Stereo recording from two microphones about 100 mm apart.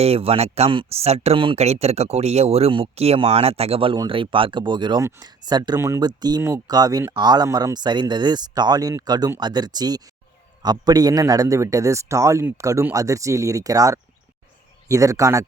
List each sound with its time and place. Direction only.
0.0 s speech: 85° right
4.1 s speech: 60° right (ahead or behind)
4.9 s a man's voice: 40° right (ahead or behind)